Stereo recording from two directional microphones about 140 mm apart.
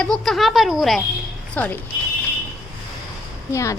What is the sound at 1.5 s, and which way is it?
Speech, 10° left (ahead or behind).